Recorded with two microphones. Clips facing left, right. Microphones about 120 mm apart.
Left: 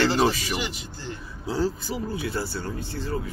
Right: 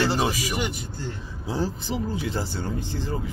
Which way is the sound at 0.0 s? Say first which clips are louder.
Left 2 dB; 10° right (ahead or behind).